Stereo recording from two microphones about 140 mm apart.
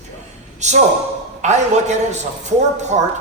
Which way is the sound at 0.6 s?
55° right (ahead or behind).